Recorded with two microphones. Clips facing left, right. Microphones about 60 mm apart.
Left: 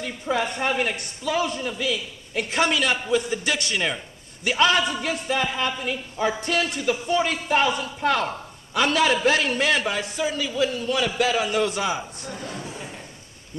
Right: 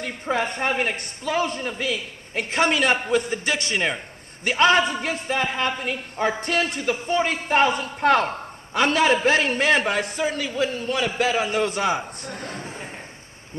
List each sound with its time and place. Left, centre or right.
0.0 s a woman's voice: right
3.4 s a woman's voice: right
9.9 s a woman's voice: right